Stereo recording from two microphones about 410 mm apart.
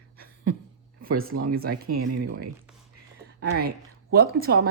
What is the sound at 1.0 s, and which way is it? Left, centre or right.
Speech, right.